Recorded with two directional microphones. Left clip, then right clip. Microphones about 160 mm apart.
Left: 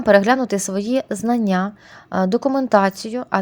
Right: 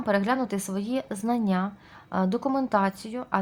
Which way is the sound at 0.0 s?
40° left (ahead or behind).